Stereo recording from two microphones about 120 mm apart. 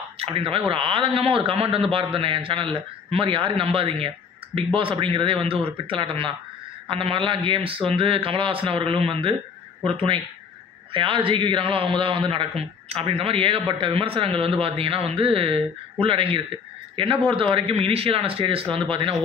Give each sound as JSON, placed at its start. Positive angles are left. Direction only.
{"t": 0.2, "sound": "a man's voice", "side_deg": -50}